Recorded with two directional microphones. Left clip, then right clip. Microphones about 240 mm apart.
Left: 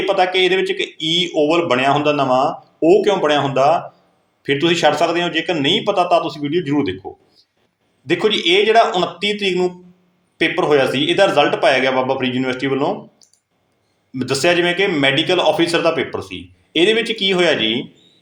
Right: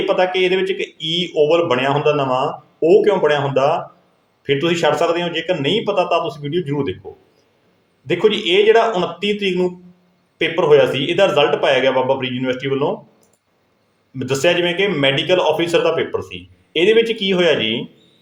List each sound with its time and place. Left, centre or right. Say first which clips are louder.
0.0 s speech: left 1 dB; centre
8.0 s speech: even; centre
14.2 s speech: left 1 dB; centre